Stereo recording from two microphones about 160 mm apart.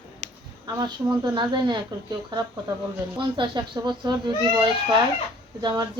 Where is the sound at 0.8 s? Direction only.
25° right (ahead or behind).